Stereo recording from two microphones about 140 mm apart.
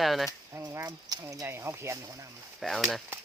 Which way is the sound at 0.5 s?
20° right (ahead or behind).